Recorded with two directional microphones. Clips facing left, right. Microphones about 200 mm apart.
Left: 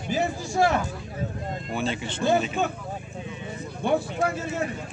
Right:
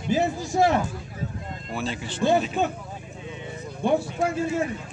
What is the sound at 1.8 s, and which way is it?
Speech, centre (ahead or behind).